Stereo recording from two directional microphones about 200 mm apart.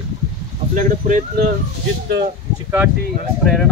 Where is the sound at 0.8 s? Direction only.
40° right (ahead or behind).